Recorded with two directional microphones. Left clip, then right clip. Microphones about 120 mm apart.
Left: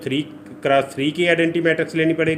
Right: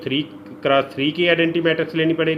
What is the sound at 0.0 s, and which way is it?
A man's voice, 20° left (ahead or behind).